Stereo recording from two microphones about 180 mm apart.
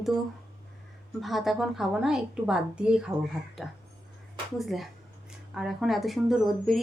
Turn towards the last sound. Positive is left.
turn(degrees=0)  # may be behind; listen again after turning